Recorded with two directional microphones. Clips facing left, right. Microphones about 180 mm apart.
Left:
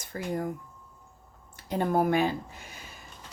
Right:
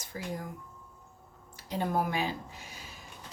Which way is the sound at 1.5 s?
55° left (ahead or behind).